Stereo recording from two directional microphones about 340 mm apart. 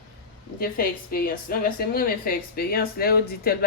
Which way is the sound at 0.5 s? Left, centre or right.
Left.